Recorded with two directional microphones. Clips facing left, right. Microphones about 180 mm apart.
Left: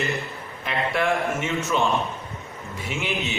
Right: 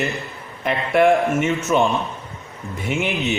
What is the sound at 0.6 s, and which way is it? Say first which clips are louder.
Speech: right 8 dB; 55° right (ahead or behind).